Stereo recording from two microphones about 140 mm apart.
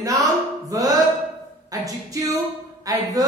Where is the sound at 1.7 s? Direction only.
25° right (ahead or behind).